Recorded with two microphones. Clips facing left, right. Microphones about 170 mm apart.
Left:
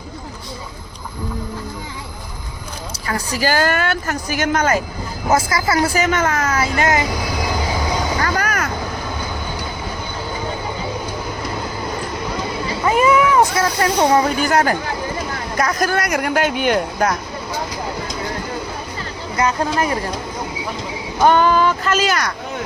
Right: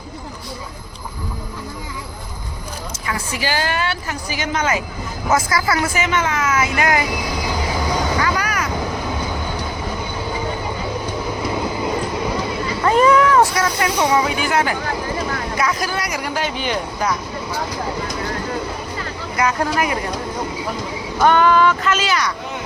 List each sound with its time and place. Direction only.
3.1 s speech: 40° left (ahead or behind)
5.3 s speech: 25° left (ahead or behind)
8.2 s vehicle: 45° left (ahead or behind)
12.8 s vehicle: 10° left (ahead or behind)
13.6 s speech: 35° left (ahead or behind); by 17.2 s 55° left (ahead or behind)
19.4 s speech: 25° left (ahead or behind)
21.2 s speech: 35° left (ahead or behind)